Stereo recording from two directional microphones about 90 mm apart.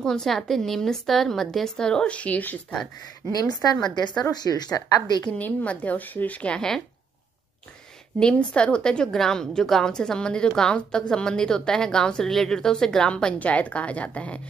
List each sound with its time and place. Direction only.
0.0 s a woman's voice: 5° left (ahead or behind)
3.3 s speech: 45° left (ahead or behind)
5.2 s a woman's voice: 15° left (ahead or behind)
8.2 s a woman's voice: 10° left (ahead or behind)